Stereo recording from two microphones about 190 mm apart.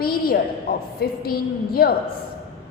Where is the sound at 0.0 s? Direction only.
50° left (ahead or behind).